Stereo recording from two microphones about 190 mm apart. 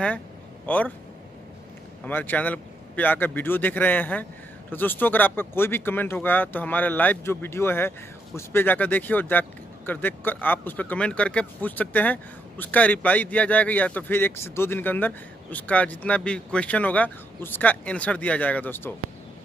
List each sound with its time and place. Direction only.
0.7 s speech: 10° left (ahead or behind)
2.0 s speech: 10° left (ahead or behind)